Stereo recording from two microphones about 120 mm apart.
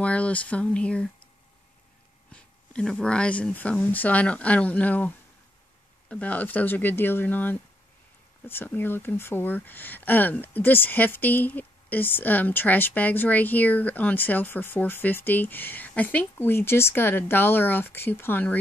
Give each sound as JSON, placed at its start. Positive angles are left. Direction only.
{"t": 0.0, "sound": "speech", "side_deg": 10}
{"t": 2.3, "sound": "speech", "side_deg": 10}